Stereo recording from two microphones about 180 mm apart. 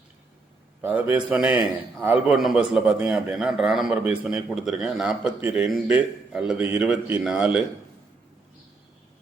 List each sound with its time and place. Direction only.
0.8 s a man's voice: 10° right (ahead or behind)